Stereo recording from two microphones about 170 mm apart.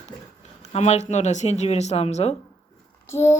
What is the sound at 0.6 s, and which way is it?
Speech, 40° left (ahead or behind).